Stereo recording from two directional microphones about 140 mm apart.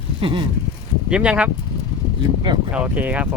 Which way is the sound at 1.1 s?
5° right (ahead or behind).